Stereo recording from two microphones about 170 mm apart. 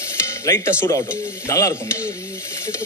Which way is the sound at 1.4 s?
20° left (ahead or behind).